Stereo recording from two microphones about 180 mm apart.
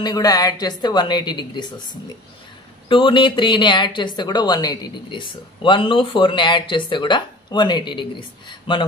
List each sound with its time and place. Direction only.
0.0 s a woman's voice: 20° left (ahead or behind)